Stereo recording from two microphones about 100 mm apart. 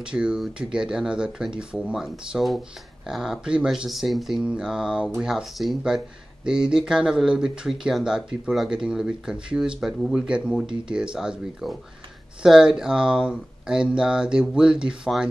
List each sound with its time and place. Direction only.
0.0 s speech: 10° right (ahead or behind)